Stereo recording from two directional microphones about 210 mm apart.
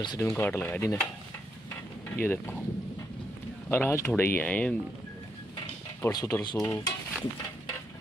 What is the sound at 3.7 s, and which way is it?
Speech, 10° left (ahead or behind).